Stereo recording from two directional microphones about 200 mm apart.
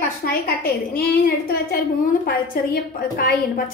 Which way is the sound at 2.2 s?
45° left (ahead or behind).